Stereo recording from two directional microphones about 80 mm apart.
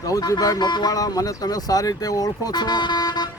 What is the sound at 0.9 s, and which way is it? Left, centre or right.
Speech, left.